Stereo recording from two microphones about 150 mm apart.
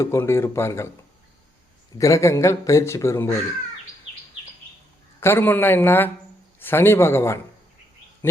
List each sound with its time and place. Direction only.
0.0 s a man's voice: 20° left (ahead or behind)
2.0 s speech: 20° left (ahead or behind)
5.2 s a man's voice: 15° left (ahead or behind)